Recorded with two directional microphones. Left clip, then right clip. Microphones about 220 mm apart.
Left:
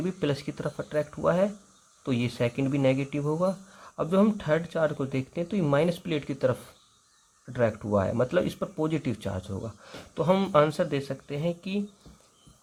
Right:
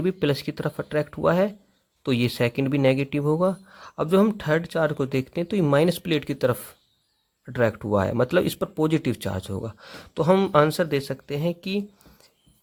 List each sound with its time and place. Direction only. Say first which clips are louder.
0.0 s speech: right 6 dB; 35° right (ahead or behind)